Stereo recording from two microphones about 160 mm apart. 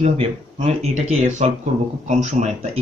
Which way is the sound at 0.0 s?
45° right (ahead or behind).